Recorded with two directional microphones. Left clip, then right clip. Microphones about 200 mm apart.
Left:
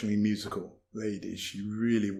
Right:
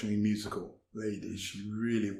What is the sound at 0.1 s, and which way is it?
Speech, 30° left (ahead or behind).